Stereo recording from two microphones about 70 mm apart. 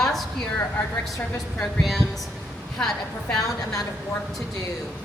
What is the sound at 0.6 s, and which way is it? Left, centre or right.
Speech, left.